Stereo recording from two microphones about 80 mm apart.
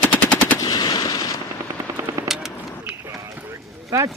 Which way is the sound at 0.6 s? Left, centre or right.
Left.